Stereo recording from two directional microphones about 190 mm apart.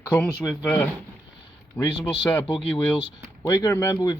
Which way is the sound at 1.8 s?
20° left (ahead or behind).